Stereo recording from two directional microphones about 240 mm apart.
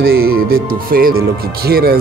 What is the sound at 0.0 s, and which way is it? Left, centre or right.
Speech, right.